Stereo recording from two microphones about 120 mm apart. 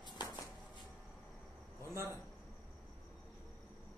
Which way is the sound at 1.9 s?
20° right (ahead or behind).